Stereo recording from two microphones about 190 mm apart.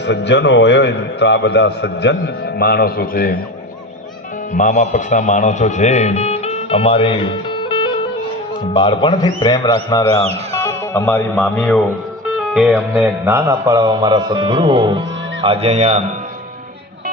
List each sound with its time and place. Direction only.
0.0 s a man's voice: 65° left (ahead or behind)
4.5 s speech: 40° left (ahead or behind)
8.7 s speech: 25° left (ahead or behind); by 11.8 s 5° left (ahead or behind)
12.5 s music: centre (ahead or behind); by 16.0 s 35° right (ahead or behind)